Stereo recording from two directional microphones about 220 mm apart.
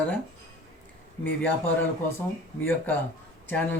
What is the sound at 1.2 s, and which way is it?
Speech, 10° left (ahead or behind).